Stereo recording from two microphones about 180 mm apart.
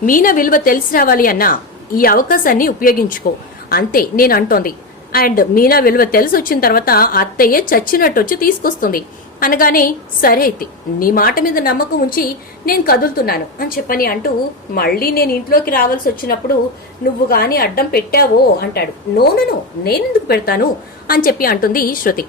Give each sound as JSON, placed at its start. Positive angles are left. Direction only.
{"t": 0.0, "sound": "a woman's voice", "side_deg": 50}